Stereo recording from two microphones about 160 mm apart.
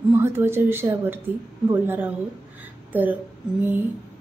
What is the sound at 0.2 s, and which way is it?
Speech, 15° right (ahead or behind).